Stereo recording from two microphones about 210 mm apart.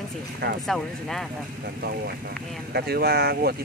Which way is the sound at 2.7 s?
50° right (ahead or behind).